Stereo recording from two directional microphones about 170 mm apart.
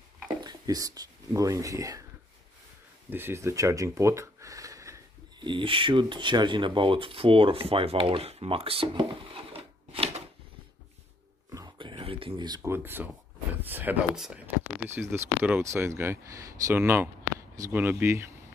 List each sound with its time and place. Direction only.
0.4 s speech: 25° right (ahead or behind)
3.1 s speech: 15° right (ahead or behind); by 10.3 s 35° right (ahead or behind)
11.5 s a sound: 25° right (ahead or behind)
13.7 s speech: 10° right (ahead or behind)